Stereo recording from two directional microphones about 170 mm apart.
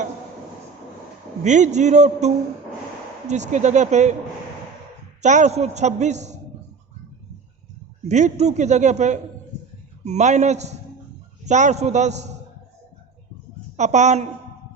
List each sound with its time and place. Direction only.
1.5 s a man's voice: 45° right (ahead or behind)
5.2 s a man's voice: 45° right (ahead or behind)
8.0 s a man's voice: 45° right (ahead or behind)
13.7 s a man's voice: 45° right (ahead or behind)